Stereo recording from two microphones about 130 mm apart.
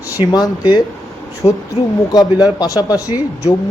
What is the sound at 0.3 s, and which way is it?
Speech, 30° left (ahead or behind).